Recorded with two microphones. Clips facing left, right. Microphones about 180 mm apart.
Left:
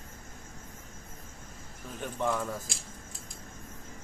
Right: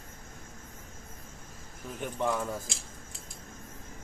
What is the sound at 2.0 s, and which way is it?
Speech, 15° right (ahead or behind).